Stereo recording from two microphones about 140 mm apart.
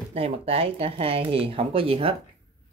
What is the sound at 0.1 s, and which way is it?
Speech, 45° right (ahead or behind).